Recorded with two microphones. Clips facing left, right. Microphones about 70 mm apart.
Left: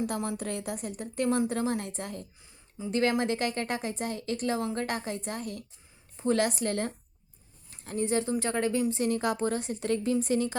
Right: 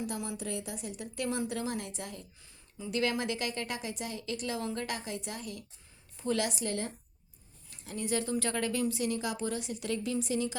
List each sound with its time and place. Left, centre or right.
0.1 s a woman's voice: left
7.9 s a woman's voice: left